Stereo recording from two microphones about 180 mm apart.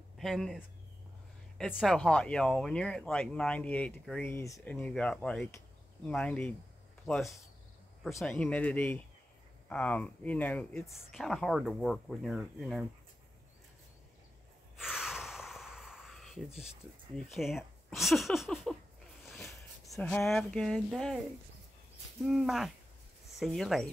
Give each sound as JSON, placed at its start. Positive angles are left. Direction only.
{"t": 0.2, "sound": "speech", "side_deg": 0}
{"t": 4.3, "sound": "speech", "side_deg": 15}
{"t": 14.8, "sound": "snort", "side_deg": -5}
{"t": 17.3, "sound": "speech", "side_deg": 0}
{"t": 22.2, "sound": "speech", "side_deg": 0}